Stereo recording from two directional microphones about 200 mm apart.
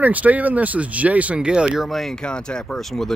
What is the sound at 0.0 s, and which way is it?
Speech, 10° right (ahead or behind).